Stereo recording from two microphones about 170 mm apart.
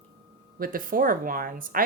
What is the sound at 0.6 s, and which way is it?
Speech, 55° right (ahead or behind).